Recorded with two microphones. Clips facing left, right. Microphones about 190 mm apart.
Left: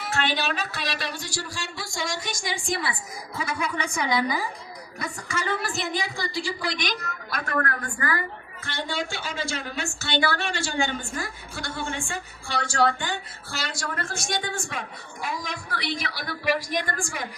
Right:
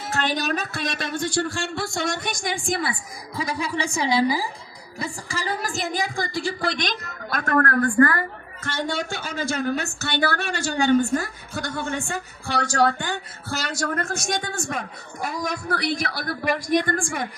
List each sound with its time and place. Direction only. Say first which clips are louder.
0.1 s a woman's voice: right 2 dB; 40° right (ahead or behind)
3.3 s a woman's voice: right 3 dB; 35° right (ahead or behind); by 8.2 s 55° right (ahead or behind)
8.6 s a woman's voice: right 4 dB; 45° right (ahead or behind)